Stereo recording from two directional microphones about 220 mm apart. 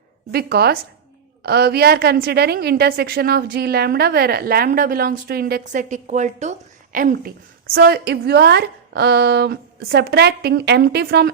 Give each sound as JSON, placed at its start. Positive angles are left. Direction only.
{"t": 0.3, "sound": "a woman's voice", "side_deg": -45}